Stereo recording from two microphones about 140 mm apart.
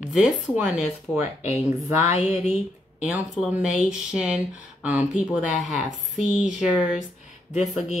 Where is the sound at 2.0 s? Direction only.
55° left (ahead or behind).